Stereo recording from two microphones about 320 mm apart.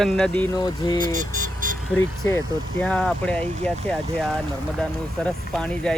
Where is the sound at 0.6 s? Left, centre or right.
Centre.